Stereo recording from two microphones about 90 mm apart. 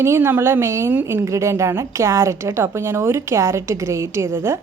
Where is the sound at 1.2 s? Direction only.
35° right (ahead or behind).